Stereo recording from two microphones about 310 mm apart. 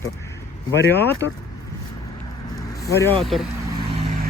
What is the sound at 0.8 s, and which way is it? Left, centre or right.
Speech, left.